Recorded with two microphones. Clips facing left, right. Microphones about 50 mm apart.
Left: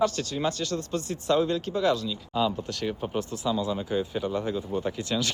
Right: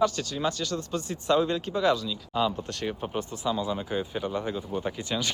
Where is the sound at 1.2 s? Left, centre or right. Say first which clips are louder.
Even; right.